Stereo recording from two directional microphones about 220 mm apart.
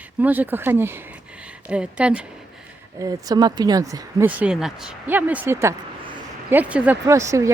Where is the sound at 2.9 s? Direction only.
15° right (ahead or behind).